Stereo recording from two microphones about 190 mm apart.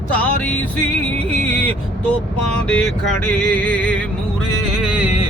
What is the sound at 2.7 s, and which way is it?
Music, 5° left (ahead or behind).